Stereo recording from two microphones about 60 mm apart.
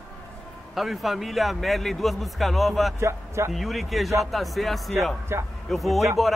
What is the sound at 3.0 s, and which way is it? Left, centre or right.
Speech, right.